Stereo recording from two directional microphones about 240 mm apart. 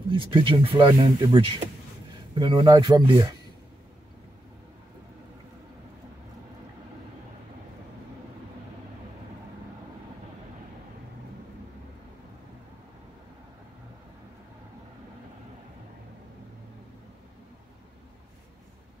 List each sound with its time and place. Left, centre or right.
0.1 s speech: right